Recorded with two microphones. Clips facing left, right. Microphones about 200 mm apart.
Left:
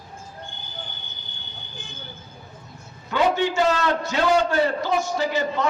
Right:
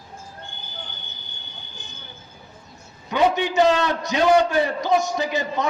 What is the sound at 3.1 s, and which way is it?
A man's voice, 15° right (ahead or behind).